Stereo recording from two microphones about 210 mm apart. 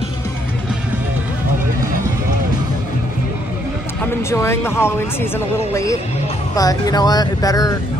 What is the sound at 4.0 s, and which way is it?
Speech, 10° left (ahead or behind).